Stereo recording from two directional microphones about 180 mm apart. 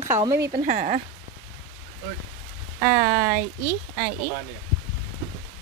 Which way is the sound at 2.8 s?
55° right (ahead or behind).